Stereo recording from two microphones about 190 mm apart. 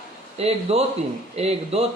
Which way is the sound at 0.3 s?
35° right (ahead or behind).